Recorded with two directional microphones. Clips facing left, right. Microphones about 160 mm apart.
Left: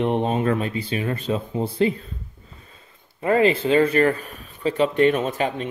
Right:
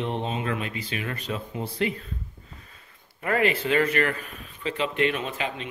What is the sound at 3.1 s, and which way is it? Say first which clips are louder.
Speech: left 6 dB; 25° left (ahead or behind).